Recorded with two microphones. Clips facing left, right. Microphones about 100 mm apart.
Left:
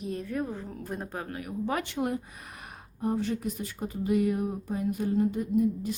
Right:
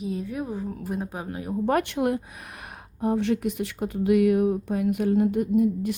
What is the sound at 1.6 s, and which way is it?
A woman's voice, 60° right (ahead or behind).